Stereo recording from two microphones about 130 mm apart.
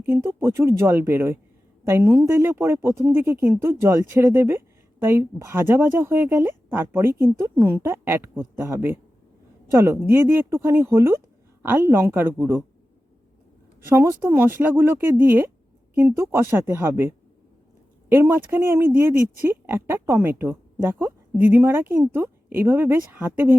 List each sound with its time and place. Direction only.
0.0 s speech: 20° right (ahead or behind)
13.8 s speech: 20° right (ahead or behind)